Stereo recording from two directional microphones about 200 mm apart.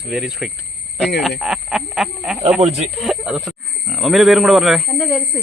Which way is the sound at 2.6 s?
30° right (ahead or behind).